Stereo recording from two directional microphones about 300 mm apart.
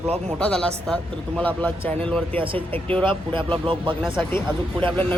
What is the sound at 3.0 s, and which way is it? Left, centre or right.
Speech, centre.